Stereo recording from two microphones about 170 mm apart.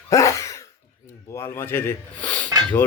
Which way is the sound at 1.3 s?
15° left (ahead or behind).